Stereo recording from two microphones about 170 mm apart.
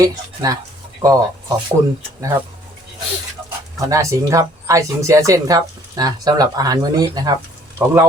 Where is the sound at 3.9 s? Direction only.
20° right (ahead or behind).